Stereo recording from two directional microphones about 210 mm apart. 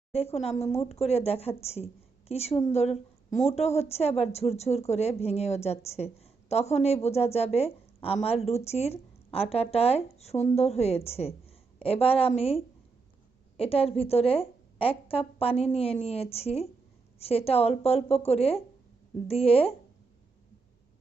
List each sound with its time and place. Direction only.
0.1 s a woman's voice: 30° left (ahead or behind)